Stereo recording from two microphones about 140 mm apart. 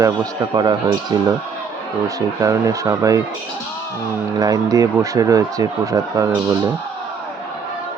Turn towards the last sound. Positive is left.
turn(degrees=-20)  # may be behind; listen again after turning